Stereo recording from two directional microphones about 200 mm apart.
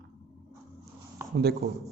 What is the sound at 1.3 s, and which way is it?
Speech, 50° right (ahead or behind).